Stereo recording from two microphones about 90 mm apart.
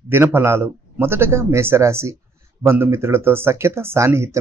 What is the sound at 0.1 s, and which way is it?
Speech, 25° right (ahead or behind).